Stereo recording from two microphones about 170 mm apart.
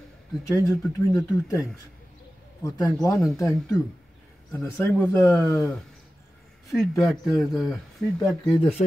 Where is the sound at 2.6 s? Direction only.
20° left (ahead or behind).